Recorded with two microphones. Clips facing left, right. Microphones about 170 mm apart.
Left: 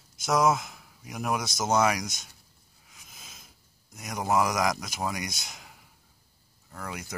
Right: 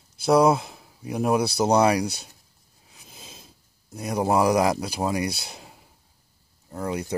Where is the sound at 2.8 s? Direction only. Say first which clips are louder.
Right 6 dB; 30° right (ahead or behind).